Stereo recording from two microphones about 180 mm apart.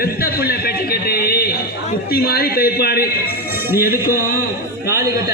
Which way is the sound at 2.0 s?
60° left (ahead or behind).